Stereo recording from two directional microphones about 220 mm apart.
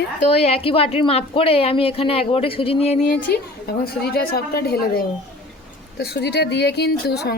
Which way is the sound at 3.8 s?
45° left (ahead or behind).